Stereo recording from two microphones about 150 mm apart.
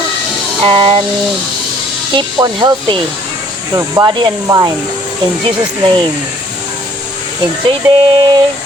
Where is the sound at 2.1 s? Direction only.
30° right (ahead or behind).